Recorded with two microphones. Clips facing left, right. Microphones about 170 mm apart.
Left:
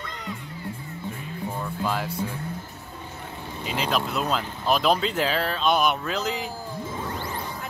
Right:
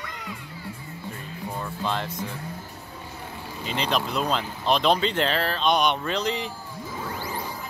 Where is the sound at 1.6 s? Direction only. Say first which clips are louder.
Left 1 dB; 5° left (ahead or behind).